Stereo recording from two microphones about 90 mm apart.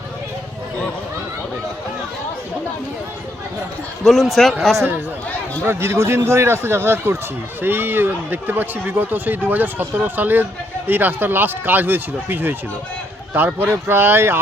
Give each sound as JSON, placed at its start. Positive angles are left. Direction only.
{"t": 4.0, "sound": "speech", "side_deg": 0}
{"t": 5.6, "sound": "speech", "side_deg": -30}